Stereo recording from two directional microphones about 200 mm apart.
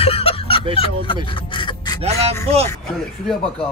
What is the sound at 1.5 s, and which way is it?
Gasp, 20° left (ahead or behind).